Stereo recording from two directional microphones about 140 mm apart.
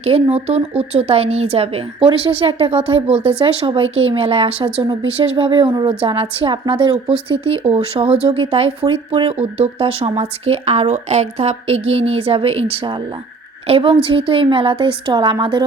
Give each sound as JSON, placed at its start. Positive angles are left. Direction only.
{"t": 0.0, "sound": "a woman's voice", "side_deg": -45}